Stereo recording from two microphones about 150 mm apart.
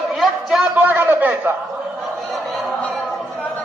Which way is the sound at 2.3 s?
Centre (ahead or behind).